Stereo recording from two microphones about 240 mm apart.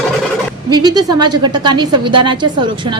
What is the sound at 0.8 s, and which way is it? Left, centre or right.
A woman's voice, centre.